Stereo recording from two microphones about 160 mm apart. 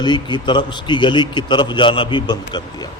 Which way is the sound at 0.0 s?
30° left (ahead or behind).